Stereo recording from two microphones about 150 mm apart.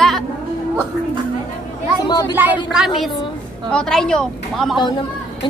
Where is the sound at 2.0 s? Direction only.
30° left (ahead or behind).